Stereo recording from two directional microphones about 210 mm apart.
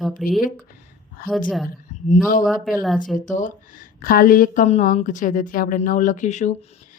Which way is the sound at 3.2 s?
35° left (ahead or behind).